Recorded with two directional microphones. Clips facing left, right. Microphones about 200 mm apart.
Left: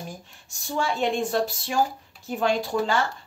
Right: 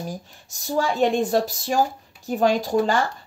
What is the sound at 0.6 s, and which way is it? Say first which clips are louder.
Speech: right 5 dB; 40° right (ahead or behind).